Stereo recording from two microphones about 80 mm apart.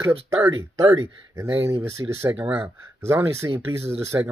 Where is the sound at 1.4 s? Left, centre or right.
Right.